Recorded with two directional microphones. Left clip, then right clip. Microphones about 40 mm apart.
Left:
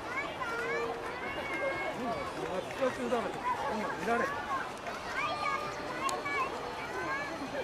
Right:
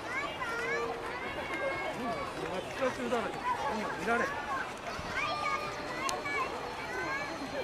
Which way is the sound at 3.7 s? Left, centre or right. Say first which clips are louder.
Even; right.